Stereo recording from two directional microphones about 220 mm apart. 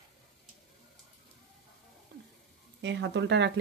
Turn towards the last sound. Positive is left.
turn(degrees=-50)  # may be behind; listen again after turning